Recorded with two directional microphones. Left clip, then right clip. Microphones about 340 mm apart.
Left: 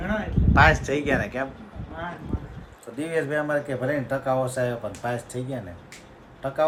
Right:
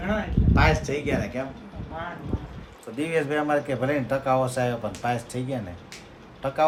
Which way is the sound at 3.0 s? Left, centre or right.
Centre.